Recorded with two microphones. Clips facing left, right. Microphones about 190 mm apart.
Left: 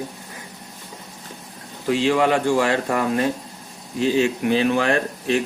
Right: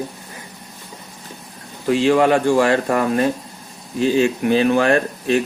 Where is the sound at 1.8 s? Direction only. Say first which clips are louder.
Right 4 dB; 50° right (ahead or behind).